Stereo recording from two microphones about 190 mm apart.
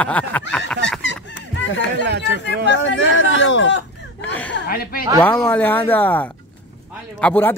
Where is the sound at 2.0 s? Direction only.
60° right (ahead or behind).